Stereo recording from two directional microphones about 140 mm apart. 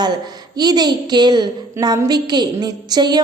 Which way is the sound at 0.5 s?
30° right (ahead or behind).